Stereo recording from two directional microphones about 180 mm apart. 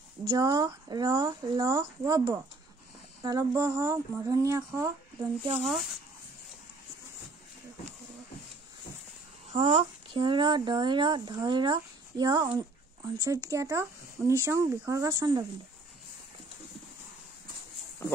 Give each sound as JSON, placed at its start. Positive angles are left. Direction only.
{"t": 0.2, "sound": "speech", "side_deg": -20}
{"t": 5.6, "sound": "speech", "side_deg": 0}
{"t": 9.5, "sound": "speech", "side_deg": -35}